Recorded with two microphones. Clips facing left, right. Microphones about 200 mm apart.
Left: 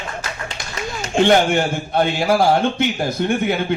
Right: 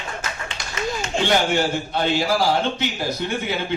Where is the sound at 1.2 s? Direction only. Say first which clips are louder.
Left 6 dB; 55° left (ahead or behind).